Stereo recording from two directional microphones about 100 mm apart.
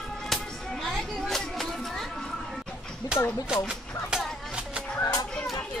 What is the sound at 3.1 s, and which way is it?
Speech, 10° right (ahead or behind).